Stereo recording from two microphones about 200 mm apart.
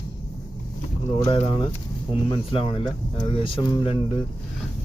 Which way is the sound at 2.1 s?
25° left (ahead or behind).